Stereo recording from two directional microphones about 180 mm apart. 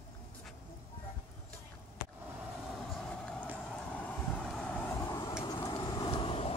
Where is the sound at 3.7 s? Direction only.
5° left (ahead or behind).